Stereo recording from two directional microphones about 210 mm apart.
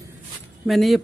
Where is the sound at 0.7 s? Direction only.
Centre (ahead or behind).